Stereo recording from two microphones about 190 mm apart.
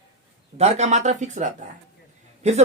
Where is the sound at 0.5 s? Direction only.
35° right (ahead or behind).